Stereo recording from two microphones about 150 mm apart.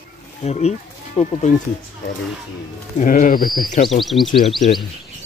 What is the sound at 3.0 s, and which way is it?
Speech, 60° left (ahead or behind).